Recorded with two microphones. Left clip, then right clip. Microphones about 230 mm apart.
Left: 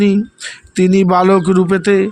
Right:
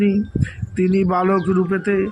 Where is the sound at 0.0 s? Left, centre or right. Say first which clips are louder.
Left 5 dB; left.